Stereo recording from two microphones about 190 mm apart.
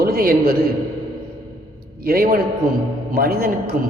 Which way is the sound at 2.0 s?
50° right (ahead or behind).